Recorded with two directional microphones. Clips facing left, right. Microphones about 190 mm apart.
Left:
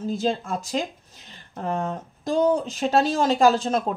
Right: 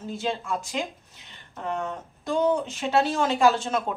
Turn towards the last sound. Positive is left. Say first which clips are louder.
# left 3 dB
turn(degrees=35)  # may be behind; listen again after turning